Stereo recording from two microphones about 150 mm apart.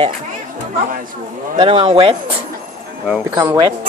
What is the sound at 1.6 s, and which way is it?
Speech, 40° right (ahead or behind).